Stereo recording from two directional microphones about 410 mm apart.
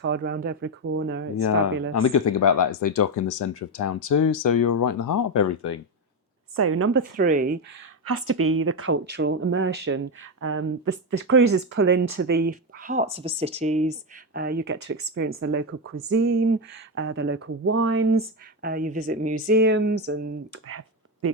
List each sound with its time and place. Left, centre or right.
0.0 s speech: right
1.4 s speech: left
6.6 s a woman's voice: right
7.2 s speech: centre
8.0 s speech: right